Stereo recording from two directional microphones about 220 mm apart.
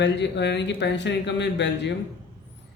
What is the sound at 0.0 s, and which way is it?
Speech, 55° left (ahead or behind).